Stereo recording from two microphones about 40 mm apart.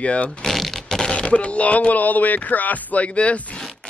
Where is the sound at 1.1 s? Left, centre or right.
Left.